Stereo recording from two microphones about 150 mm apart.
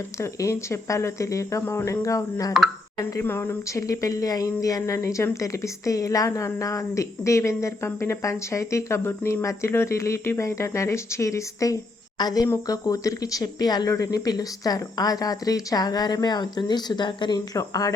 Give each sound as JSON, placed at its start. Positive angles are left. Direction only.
{"t": 0.2, "sound": "speech", "side_deg": 20}